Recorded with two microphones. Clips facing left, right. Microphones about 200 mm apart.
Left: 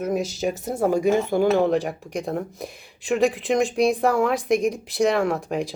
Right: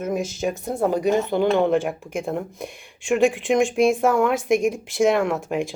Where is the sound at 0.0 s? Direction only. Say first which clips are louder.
Even; centre (ahead or behind).